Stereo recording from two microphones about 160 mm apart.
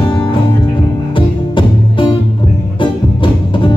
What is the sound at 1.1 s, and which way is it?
Music, 30° left (ahead or behind).